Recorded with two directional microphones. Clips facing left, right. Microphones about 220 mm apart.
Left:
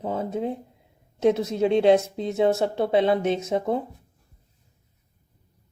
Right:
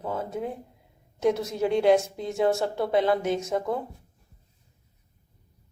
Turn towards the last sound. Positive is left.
turn(degrees=25)  # may be behind; listen again after turning